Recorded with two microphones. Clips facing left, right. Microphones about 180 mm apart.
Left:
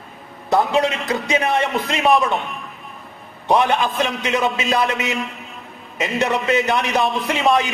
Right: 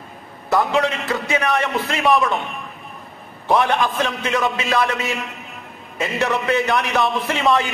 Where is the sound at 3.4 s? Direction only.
20° left (ahead or behind).